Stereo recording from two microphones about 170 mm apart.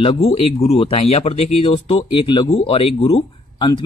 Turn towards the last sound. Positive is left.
turn(degrees=30)  # may be behind; listen again after turning